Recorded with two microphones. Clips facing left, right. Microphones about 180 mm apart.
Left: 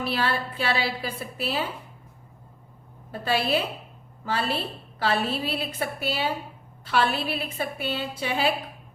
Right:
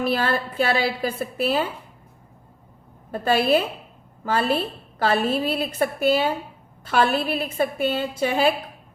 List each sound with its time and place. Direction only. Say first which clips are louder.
0.0 s a woman's voice: right 4 dB; 45° right (ahead or behind)
3.1 s a woman's voice: right 6 dB; 50° right (ahead or behind)